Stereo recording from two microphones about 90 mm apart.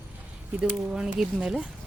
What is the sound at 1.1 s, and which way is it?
Speech, 10° right (ahead or behind).